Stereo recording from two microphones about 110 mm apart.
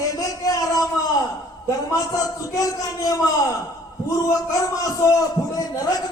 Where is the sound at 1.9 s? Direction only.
35° left (ahead or behind).